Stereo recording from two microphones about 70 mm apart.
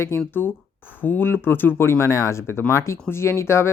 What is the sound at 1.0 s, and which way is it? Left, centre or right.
Speech, left.